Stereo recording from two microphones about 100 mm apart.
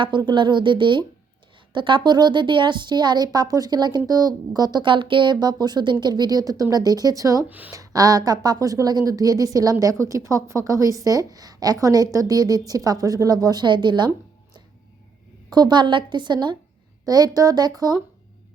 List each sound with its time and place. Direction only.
0.0 s speech: 50° right (ahead or behind); by 7.4 s 35° right (ahead or behind)
7.4 s speech: 15° right (ahead or behind)
7.7 s a woman's voice: 35° right (ahead or behind)
15.4 s a woman's voice: 45° right (ahead or behind)